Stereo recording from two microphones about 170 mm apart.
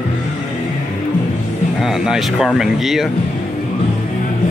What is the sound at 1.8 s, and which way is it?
Speech, 5° right (ahead or behind).